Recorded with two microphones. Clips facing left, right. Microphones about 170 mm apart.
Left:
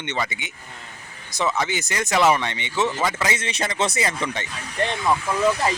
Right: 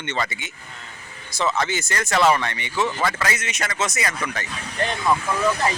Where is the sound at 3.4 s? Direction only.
30° left (ahead or behind).